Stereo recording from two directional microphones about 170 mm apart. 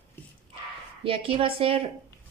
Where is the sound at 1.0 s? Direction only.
30° right (ahead or behind).